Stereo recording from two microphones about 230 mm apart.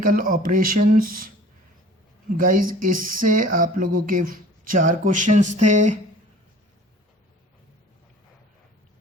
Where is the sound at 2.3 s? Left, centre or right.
Right.